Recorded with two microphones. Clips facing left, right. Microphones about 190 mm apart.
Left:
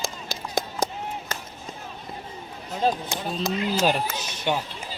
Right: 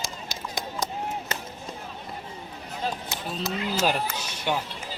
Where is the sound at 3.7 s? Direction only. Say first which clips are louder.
Left 2 dB; 25° left (ahead or behind).